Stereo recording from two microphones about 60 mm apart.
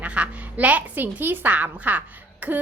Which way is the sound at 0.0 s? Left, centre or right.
Right.